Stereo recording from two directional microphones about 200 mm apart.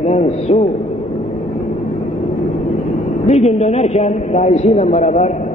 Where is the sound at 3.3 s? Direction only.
35° left (ahead or behind).